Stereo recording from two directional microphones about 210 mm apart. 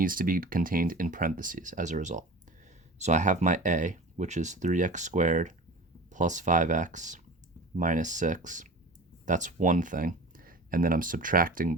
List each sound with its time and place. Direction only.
0.0 s speech: 40° right (ahead or behind)